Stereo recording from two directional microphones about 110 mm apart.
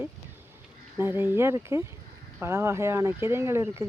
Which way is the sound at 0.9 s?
20° right (ahead or behind).